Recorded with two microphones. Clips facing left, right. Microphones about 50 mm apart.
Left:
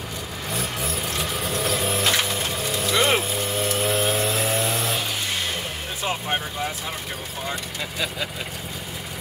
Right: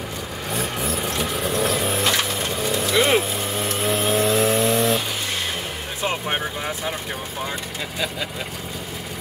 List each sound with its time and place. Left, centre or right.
0.5 s vehicle: centre
6.2 s vehicle: centre